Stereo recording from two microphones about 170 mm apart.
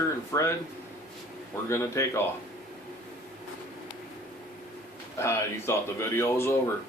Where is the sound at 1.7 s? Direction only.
15° left (ahead or behind).